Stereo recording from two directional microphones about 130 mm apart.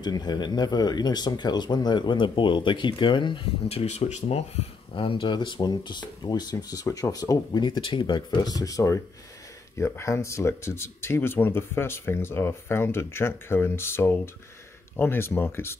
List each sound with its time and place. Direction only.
0.0 s speech: 30° left (ahead or behind)
3.6 s speech: 55° left (ahead or behind); by 15.8 s 20° left (ahead or behind)